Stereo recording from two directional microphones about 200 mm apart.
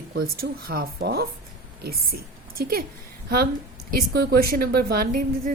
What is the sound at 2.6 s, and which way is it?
A woman's voice, 50° right (ahead or behind).